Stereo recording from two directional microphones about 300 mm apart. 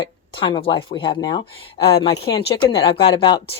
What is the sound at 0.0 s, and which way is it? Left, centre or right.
Speech, centre.